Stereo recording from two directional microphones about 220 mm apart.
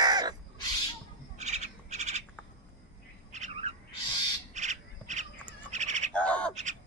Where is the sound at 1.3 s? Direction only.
30° right (ahead or behind).